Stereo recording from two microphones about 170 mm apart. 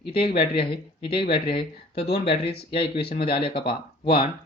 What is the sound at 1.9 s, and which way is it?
Speech, 70° left (ahead or behind).